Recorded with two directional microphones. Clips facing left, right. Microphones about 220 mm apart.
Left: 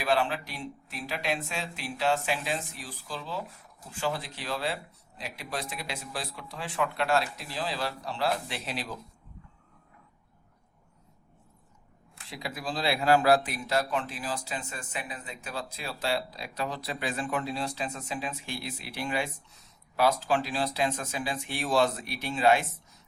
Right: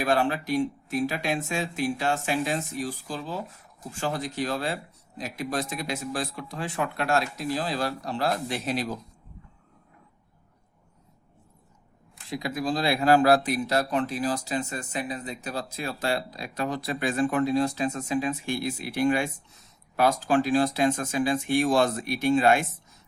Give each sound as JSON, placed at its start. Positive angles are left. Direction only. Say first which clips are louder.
{"t": 0.0, "sound": "speech", "louder": "right 3 dB", "side_deg": -45}
{"t": 12.3, "sound": "speech", "louder": "right 7 dB", "side_deg": -45}